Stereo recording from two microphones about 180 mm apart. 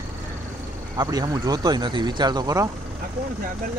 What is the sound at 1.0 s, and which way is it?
Speech, 20° right (ahead or behind).